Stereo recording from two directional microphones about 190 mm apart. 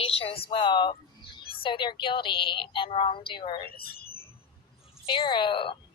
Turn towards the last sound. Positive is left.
turn(degrees=25)  # may be behind; listen again after turning